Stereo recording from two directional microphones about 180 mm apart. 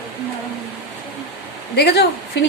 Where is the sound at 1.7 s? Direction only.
65° left (ahead or behind).